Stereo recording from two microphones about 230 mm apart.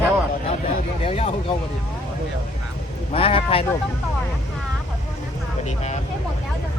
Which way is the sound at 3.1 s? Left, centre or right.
Left.